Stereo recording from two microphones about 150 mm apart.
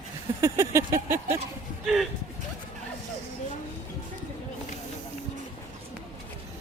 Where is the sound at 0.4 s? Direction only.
20° right (ahead or behind).